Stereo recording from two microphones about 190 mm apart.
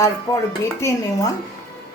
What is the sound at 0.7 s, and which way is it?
Speech, 15° left (ahead or behind).